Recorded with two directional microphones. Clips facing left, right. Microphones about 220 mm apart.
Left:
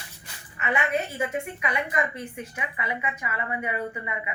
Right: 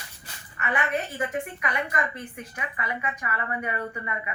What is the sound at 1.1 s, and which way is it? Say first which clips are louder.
A woman's voice: left 1 dB; 25° left (ahead or behind).